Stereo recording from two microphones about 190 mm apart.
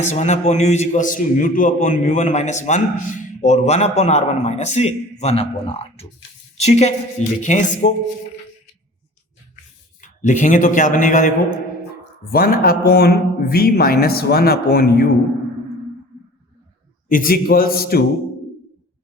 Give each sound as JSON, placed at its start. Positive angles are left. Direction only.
{"t": 0.0, "sound": "a man's voice", "side_deg": 35}
{"t": 10.0, "sound": "a man's voice", "side_deg": 40}
{"t": 17.1, "sound": "speech", "side_deg": 50}